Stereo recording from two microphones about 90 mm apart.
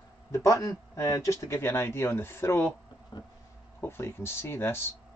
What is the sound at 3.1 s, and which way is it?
Speech, 50° left (ahead or behind).